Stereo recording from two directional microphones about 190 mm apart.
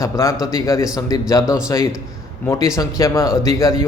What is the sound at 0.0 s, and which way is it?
A man's voice, 15° left (ahead or behind).